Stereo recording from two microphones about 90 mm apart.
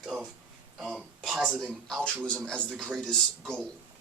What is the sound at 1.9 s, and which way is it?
Speech, 10° left (ahead or behind).